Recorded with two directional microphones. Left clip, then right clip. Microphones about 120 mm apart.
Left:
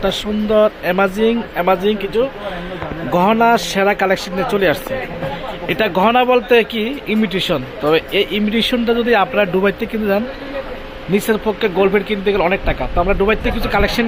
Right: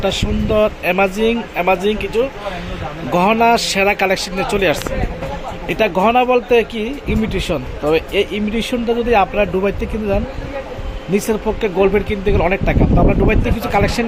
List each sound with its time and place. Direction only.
0.0 s speech: centre (ahead or behind)
11.1 s speech: 20° right (ahead or behind)